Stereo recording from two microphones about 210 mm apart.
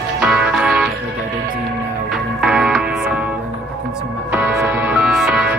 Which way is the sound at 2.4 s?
Centre (ahead or behind).